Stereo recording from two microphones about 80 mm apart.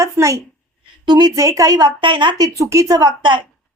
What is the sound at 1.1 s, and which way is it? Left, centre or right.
A woman's voice, right.